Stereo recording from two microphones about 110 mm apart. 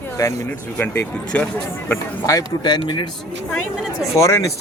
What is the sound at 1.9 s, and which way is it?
Speech, 30° left (ahead or behind).